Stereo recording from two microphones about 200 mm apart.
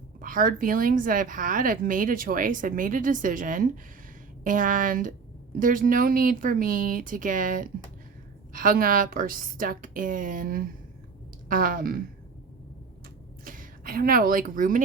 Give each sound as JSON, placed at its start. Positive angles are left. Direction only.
{"t": 0.2, "sound": "a woman's voice", "side_deg": -45}
{"t": 13.4, "sound": "speech", "side_deg": -45}